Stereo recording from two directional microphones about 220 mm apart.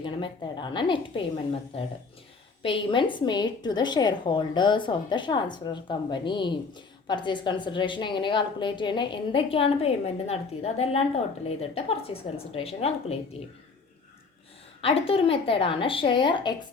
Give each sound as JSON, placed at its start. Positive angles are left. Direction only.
{"t": 0.0, "sound": "a woman's voice", "side_deg": 20}
{"t": 2.6, "sound": "a woman's voice", "side_deg": 25}
{"t": 14.8, "sound": "a woman's voice", "side_deg": 25}